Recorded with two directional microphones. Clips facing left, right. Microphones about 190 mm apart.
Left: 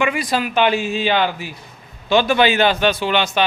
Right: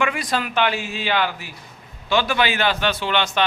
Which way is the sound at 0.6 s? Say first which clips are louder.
Left 6 dB; 20° left (ahead or behind).